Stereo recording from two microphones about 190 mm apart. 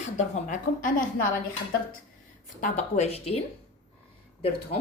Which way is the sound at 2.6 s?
35° left (ahead or behind).